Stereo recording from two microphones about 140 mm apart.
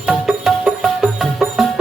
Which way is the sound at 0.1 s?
5° right (ahead or behind).